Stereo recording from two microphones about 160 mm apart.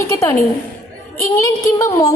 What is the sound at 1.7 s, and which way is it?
Speech, 20° left (ahead or behind).